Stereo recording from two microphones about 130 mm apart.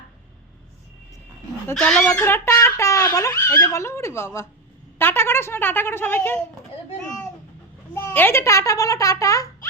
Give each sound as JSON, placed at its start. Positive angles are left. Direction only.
{"t": 1.7, "sound": "speech", "side_deg": 5}
{"t": 2.1, "sound": "a child's voice", "side_deg": 20}
{"t": 7.9, "sound": "a child's voice", "side_deg": 15}